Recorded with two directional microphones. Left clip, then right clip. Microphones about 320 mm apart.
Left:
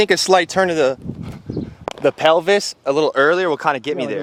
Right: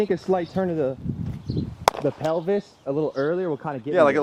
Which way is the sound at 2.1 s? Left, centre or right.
Centre.